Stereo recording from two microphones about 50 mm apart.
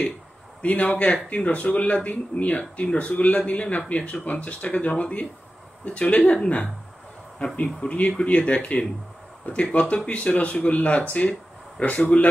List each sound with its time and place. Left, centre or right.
0.6 s a man's voice: left